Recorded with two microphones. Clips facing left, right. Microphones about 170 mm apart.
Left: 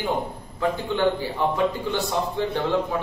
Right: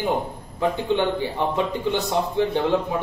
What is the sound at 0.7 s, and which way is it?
Speech, 20° right (ahead or behind).